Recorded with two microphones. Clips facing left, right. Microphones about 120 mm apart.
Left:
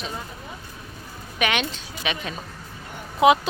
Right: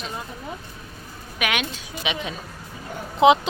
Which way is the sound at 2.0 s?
15° right (ahead or behind).